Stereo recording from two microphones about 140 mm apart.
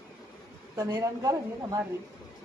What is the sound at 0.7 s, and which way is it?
Speech, 25° right (ahead or behind).